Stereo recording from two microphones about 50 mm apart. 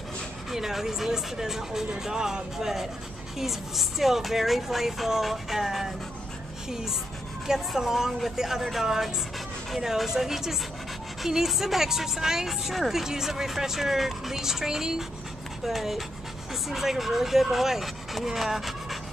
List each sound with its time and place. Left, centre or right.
0.5 s a woman's voice: centre